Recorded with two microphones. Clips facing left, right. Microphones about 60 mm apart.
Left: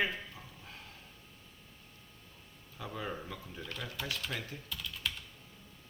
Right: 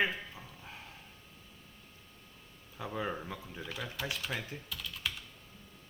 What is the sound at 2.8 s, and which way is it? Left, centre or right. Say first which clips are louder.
Speech: right 3 dB; centre.